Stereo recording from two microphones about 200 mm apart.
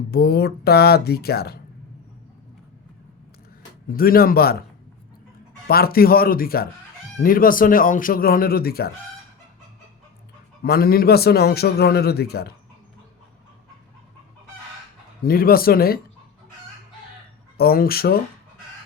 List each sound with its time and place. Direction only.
0.1 s a man's voice: 50° left (ahead or behind)
3.9 s a man's voice: 50° left (ahead or behind)
5.6 s a man's voice: 50° left (ahead or behind)
10.6 s a man's voice: 50° left (ahead or behind)
15.2 s a man's voice: 50° left (ahead or behind)
17.6 s a man's voice: 50° left (ahead or behind)